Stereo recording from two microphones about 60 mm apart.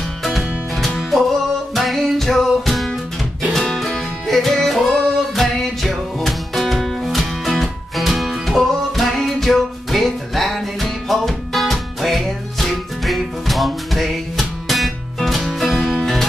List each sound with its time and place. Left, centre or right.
1.8 s music: centre